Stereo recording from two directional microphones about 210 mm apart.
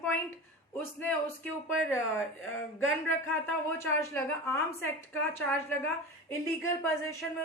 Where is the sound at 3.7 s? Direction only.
10° left (ahead or behind).